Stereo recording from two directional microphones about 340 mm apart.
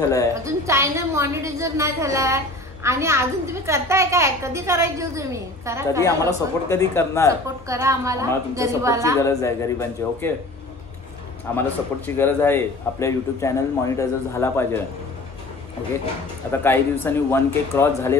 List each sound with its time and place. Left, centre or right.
0.3 s a woman's voice: centre
6.2 s a man's voice: centre
7.2 s a woman's voice: centre
9.2 s a man's voice: centre
11.5 s a man's voice: centre
16.6 s a man's voice: centre